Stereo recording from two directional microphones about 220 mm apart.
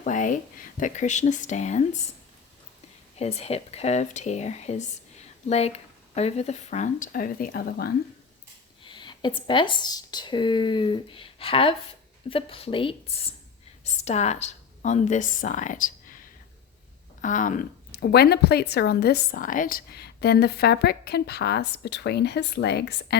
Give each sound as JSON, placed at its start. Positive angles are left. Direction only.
{"t": 0.0, "sound": "speech", "side_deg": 35}
{"t": 3.2, "sound": "speech", "side_deg": 30}
{"t": 8.8, "sound": "speech", "side_deg": 20}
{"t": 17.2, "sound": "speech", "side_deg": 35}